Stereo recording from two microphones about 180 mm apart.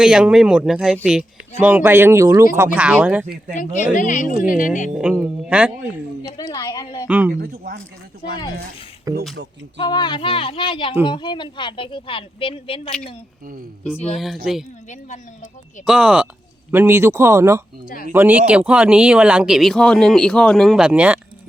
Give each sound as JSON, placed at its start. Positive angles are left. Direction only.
{"t": 0.0, "sound": "speech", "side_deg": -5}
{"t": 3.5, "sound": "speech", "side_deg": 45}
{"t": 4.9, "sound": "speech", "side_deg": -5}
{"t": 6.2, "sound": "a woman's voice", "side_deg": 20}
{"t": 7.1, "sound": "speech", "side_deg": -10}
{"t": 7.3, "sound": "speech", "side_deg": -60}
{"t": 9.1, "sound": "speech", "side_deg": -20}
{"t": 9.7, "sound": "speech", "side_deg": 25}
{"t": 14.2, "sound": "speech", "side_deg": 0}
{"t": 15.9, "sound": "speech", "side_deg": -5}
{"t": 17.8, "sound": "speech", "side_deg": 50}
{"t": 18.1, "sound": "speech", "side_deg": -10}